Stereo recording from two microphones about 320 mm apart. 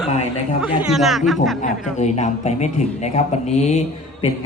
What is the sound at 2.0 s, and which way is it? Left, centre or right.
Speech, left.